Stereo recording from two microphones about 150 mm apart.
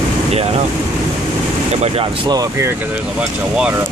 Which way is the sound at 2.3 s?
20° right (ahead or behind).